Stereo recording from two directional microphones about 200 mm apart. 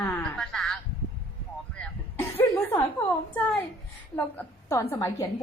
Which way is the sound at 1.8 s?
10° left (ahead or behind).